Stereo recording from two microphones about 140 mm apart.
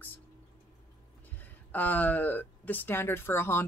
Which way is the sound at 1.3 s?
15° left (ahead or behind).